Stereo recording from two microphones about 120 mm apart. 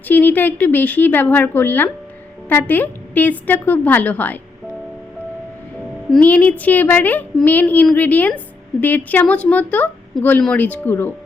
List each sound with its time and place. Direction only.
0.1 s a woman's voice: 15° left (ahead or behind)
6.1 s a woman's voice: 10° left (ahead or behind)